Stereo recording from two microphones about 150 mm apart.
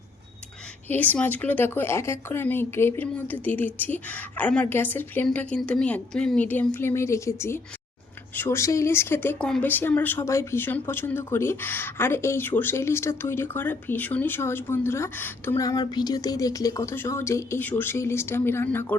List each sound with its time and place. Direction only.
0.9 s speech: 10° left (ahead or behind)